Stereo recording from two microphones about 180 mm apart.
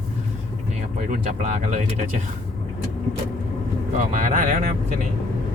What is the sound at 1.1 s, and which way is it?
Speech, 40° right (ahead or behind).